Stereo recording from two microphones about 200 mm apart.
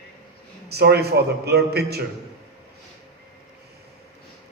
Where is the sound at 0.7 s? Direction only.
55° right (ahead or behind).